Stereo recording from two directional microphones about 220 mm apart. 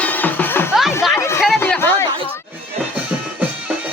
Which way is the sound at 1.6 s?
10° left (ahead or behind).